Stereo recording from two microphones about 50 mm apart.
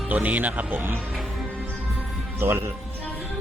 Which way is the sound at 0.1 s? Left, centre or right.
Right.